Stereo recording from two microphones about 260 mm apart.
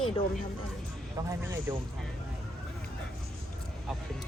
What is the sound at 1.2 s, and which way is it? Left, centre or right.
Speech, centre.